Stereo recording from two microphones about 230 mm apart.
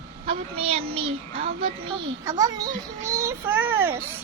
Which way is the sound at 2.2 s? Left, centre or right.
Centre.